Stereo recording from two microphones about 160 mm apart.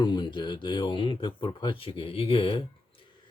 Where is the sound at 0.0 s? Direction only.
25° left (ahead or behind).